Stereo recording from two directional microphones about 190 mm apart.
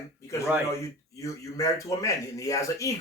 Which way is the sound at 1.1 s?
15° left (ahead or behind).